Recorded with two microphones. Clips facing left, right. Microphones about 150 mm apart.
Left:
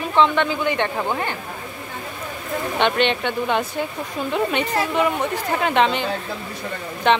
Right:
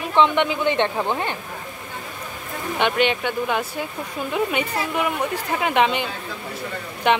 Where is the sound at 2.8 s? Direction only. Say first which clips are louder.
Even; 5° right (ahead or behind).